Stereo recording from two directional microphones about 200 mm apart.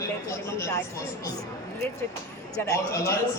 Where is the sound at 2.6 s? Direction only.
15° left (ahead or behind).